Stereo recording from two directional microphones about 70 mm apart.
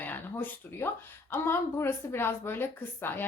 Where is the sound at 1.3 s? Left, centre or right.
Left.